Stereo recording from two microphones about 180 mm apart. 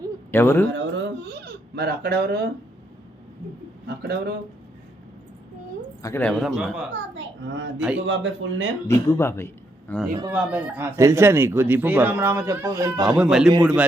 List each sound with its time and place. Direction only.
0.3 s speech: 15° left (ahead or behind)
0.7 s baby cry: 90° right; by 2.5 s 60° right (ahead or behind)
3.8 s a man's voice: 65° right (ahead or behind)
6.0 s speech: 15° left (ahead or behind)
6.2 s a man's voice: centre (ahead or behind)
6.9 s a child's voice: 90° right
8.9 s speech: 15° left (ahead or behind)
10.3 s speech: 5° right (ahead or behind)
13.1 s a man's voice: 5° right (ahead or behind)